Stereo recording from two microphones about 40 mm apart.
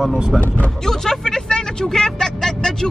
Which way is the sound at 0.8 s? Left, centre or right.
Centre.